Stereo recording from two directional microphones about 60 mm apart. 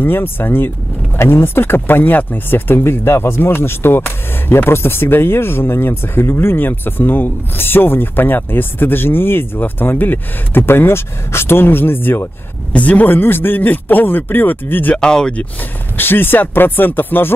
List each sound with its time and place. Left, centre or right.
0.0 s speech: left
12.7 s speech: left
15.0 s speech: centre
16.0 s speech: left